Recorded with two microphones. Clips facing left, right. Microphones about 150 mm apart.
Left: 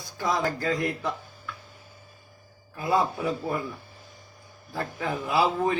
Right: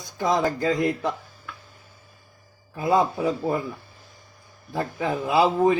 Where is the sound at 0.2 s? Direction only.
20° right (ahead or behind).